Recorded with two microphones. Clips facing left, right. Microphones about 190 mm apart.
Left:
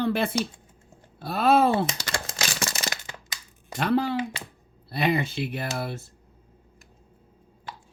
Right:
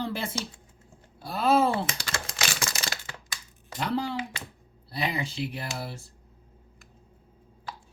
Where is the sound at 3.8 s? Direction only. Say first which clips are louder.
Left 5 dB; 60° left (ahead or behind).